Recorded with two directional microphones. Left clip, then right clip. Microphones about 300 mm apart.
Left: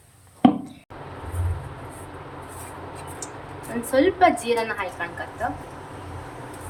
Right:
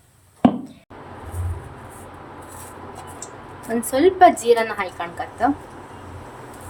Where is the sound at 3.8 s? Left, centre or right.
Right.